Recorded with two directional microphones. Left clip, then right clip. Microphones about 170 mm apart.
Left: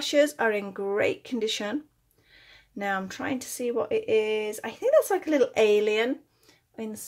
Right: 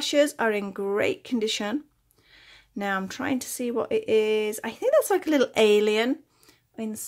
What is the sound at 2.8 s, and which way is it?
Speech, 35° right (ahead or behind).